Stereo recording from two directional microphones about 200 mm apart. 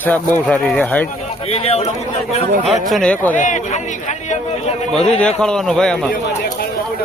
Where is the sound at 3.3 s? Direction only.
40° left (ahead or behind).